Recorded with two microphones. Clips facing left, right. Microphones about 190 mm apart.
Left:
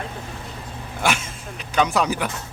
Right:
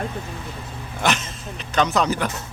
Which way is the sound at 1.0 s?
10° left (ahead or behind).